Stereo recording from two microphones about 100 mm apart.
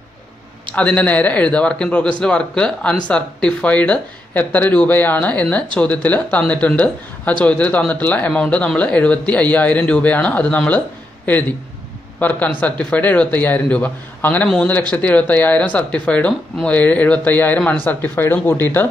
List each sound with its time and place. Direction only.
0.7 s speech: 15° left (ahead or behind)
12.2 s speech: 15° left (ahead or behind)